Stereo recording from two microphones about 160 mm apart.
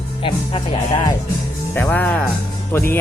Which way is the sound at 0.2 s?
35° left (ahead or behind).